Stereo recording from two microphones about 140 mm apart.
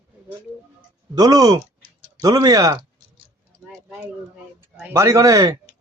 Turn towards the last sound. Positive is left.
turn(degrees=-25)  # may be behind; listen again after turning